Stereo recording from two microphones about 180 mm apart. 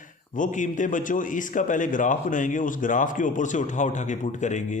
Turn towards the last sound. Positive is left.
turn(degrees=40)  # may be behind; listen again after turning